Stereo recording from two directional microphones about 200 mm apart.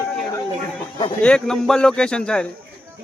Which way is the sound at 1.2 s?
5° left (ahead or behind).